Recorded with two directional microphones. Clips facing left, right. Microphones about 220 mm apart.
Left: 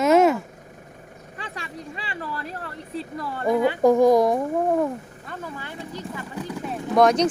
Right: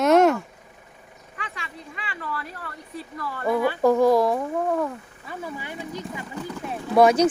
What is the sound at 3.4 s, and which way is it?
Speech, 20° left (ahead or behind).